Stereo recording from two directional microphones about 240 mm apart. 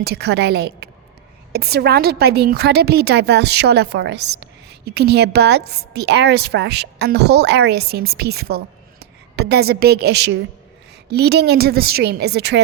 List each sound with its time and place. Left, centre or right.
0.0 s a woman's voice: right